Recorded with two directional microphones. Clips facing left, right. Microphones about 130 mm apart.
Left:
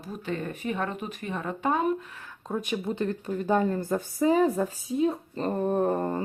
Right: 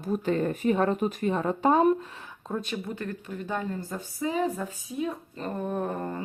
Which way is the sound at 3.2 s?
35° left (ahead or behind).